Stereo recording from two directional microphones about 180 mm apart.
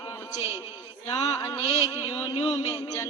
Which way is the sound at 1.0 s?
20° left (ahead or behind).